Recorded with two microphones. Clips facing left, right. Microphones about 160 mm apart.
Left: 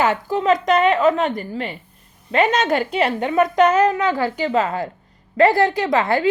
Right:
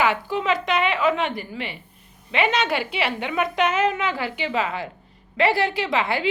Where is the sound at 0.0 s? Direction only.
40° left (ahead or behind).